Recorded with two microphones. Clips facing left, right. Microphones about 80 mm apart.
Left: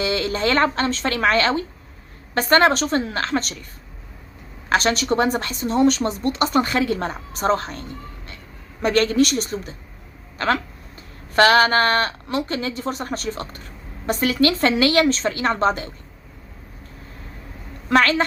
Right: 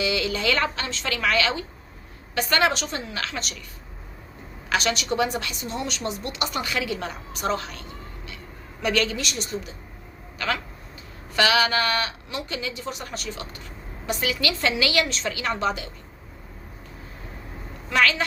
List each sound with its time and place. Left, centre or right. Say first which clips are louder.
0.0 s a woman's voice: left 3 dB; left
4.7 s a woman's voice: left 5 dB; left
17.8 s a woman's voice: left 5 dB; left